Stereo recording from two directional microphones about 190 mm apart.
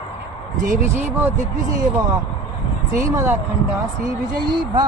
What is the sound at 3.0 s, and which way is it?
Speech, 15° right (ahead or behind).